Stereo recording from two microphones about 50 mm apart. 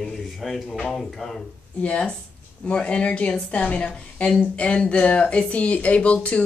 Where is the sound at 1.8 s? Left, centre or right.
Left.